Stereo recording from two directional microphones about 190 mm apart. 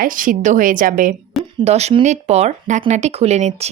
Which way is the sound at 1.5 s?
35° right (ahead or behind).